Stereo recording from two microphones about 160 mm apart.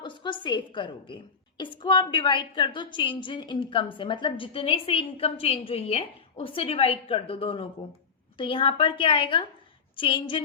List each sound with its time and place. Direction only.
0.0 s a woman's voice: 30° left (ahead or behind)